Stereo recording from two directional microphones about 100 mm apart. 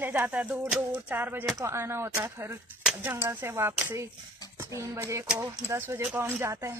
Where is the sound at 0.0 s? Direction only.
20° right (ahead or behind).